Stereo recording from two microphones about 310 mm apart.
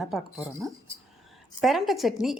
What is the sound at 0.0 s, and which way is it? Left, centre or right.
Speech, centre.